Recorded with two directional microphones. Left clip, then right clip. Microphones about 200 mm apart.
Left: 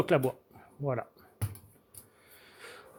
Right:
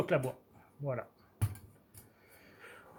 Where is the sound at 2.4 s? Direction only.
55° left (ahead or behind).